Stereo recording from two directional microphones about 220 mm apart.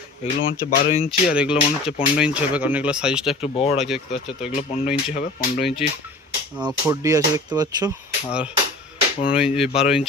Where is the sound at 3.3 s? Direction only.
25° left (ahead or behind).